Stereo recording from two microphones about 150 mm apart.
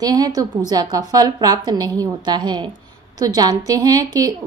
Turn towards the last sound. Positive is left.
turn(degrees=-25)  # may be behind; listen again after turning